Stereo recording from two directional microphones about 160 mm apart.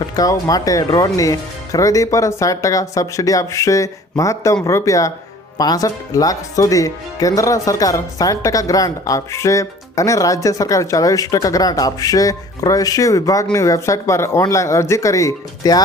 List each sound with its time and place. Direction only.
0.0 s speech: 20° left (ahead or behind)